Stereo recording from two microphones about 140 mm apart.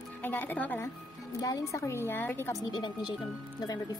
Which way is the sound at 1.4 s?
25° left (ahead or behind).